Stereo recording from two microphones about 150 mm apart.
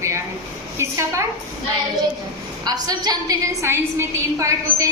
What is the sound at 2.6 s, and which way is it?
A woman's voice, 25° right (ahead or behind).